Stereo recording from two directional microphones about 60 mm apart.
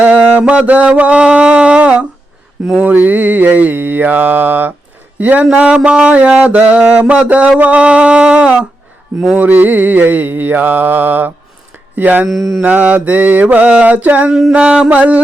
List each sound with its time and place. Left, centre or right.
0.0 s mantra: right
5.5 s music: centre
6.6 s mantra: right
12.3 s mantra: centre
12.6 s mantra: right
14.5 s mantra: centre